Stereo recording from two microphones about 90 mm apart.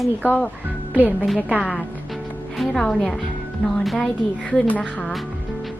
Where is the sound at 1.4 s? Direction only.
15° right (ahead or behind).